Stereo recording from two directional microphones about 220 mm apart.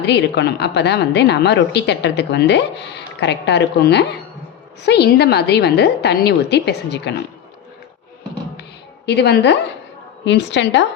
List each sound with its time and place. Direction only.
0.0 s a woman's voice: 50° left (ahead or behind)
9.0 s a woman's voice: 50° left (ahead or behind)